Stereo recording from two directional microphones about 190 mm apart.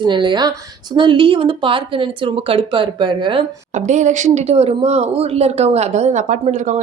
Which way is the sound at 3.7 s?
40° right (ahead or behind).